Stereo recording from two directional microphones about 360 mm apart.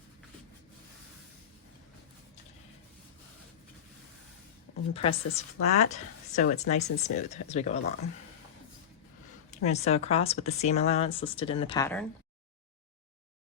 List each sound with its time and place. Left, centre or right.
4.9 s speech: centre
9.6 s speech: centre